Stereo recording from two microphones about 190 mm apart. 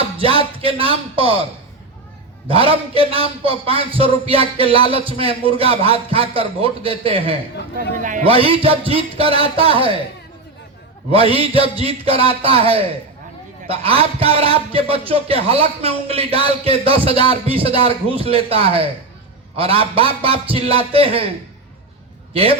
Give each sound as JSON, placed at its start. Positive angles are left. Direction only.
{"t": 0.2, "sound": "a man's voice", "side_deg": -30}
{"t": 2.5, "sound": "a man's voice", "side_deg": -30}
{"t": 7.9, "sound": "a man's voice", "side_deg": -45}
{"t": 8.2, "sound": "a man's voice", "side_deg": -30}
{"t": 11.1, "sound": "a man's voice", "side_deg": -30}
{"t": 22.3, "sound": "a man's voice", "side_deg": -30}